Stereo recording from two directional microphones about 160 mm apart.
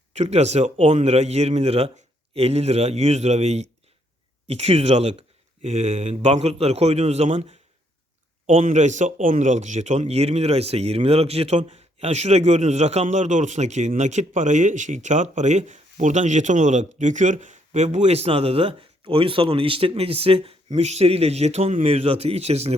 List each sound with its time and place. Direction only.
0.1 s a man's voice: 45° right (ahead or behind)
8.4 s a man's voice: 50° right (ahead or behind)